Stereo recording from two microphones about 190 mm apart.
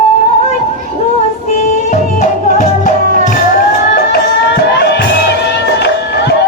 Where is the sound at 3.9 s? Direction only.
60° left (ahead or behind).